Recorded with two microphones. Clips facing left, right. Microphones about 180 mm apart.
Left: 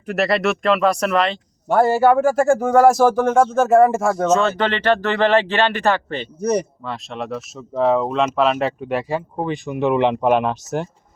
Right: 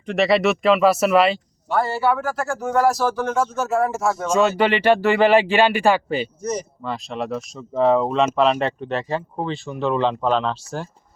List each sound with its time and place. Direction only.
0.0 s speech: 5° left (ahead or behind)
1.6 s speech: 50° left (ahead or behind)
4.3 s speech: 10° right (ahead or behind)
6.4 s speech: 65° left (ahead or behind)
6.8 s speech: centre (ahead or behind); by 10.8 s 20° left (ahead or behind)